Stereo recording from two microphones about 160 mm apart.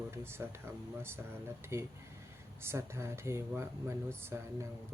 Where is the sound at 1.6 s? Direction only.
15° right (ahead or behind).